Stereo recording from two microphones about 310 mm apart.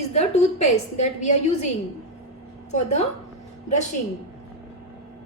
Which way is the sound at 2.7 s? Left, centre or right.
Left.